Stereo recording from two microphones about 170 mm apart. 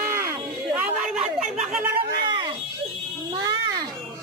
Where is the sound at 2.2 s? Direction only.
25° right (ahead or behind).